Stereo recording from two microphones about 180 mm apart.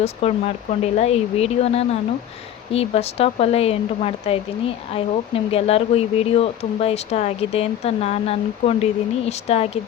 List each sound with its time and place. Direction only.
0.0 s speech: 35° left (ahead or behind)